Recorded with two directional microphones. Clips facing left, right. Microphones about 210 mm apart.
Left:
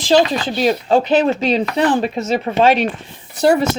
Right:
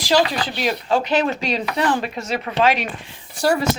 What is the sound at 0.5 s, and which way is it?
Speech, 35° left (ahead or behind).